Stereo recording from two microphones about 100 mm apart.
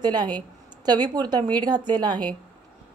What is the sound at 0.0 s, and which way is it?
A woman's voice, 45° right (ahead or behind).